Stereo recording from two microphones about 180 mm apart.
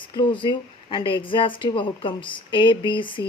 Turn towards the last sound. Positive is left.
turn(degrees=25)  # may be behind; listen again after turning